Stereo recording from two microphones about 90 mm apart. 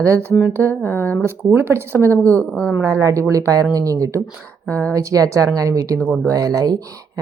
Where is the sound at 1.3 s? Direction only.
30° right (ahead or behind).